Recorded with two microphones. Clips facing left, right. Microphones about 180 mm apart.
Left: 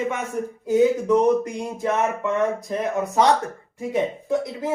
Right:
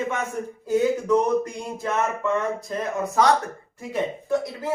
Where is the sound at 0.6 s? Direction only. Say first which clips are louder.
Left 3 dB; 20° left (ahead or behind).